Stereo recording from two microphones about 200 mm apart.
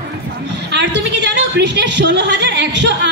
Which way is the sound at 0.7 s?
60° right (ahead or behind).